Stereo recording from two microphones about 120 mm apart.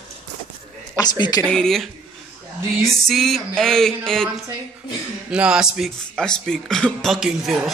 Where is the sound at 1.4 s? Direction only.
5° left (ahead or behind).